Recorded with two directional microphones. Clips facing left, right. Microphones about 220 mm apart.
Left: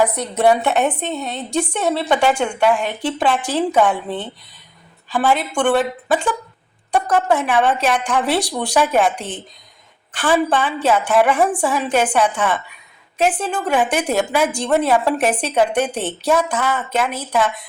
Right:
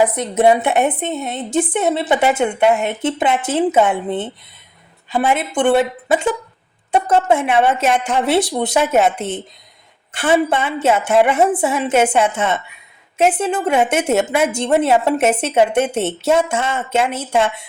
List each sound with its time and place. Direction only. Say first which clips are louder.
0.2 s a woman's voice: right 2 dB; 20° right (ahead or behind)